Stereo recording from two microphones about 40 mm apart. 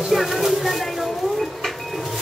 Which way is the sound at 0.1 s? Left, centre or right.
Centre.